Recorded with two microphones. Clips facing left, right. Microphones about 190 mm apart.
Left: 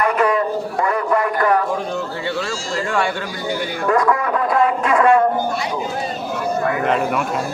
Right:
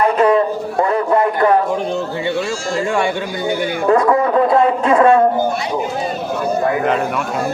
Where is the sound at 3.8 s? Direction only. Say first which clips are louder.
Right 4 dB; 30° right (ahead or behind).